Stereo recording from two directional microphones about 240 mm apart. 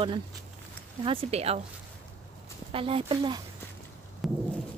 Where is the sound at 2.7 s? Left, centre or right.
Right.